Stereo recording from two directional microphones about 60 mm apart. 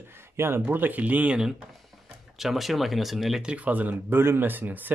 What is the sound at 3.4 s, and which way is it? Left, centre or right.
Speech, right.